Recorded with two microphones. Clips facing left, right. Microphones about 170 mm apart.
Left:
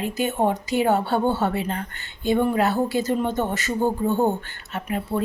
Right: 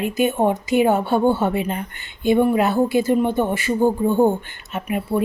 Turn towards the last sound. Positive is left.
turn(degrees=-15)  # may be behind; listen again after turning